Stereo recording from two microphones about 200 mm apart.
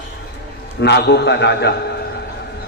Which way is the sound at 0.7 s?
60° left (ahead or behind).